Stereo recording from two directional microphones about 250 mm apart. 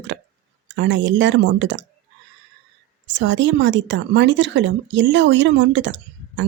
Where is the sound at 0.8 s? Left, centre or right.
Right.